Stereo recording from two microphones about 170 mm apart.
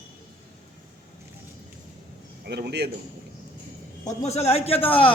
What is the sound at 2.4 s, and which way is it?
Speech, 75° right (ahead or behind).